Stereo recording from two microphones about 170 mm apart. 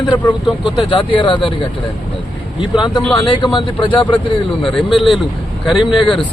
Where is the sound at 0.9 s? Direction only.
30° left (ahead or behind).